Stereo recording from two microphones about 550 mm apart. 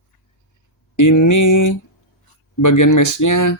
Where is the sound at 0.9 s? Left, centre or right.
Left.